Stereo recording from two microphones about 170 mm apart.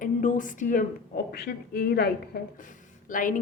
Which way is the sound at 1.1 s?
70° left (ahead or behind).